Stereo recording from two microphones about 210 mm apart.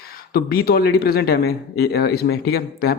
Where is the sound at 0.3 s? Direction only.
45° left (ahead or behind).